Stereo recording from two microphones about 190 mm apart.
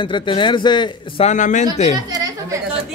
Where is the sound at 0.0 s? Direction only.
25° left (ahead or behind).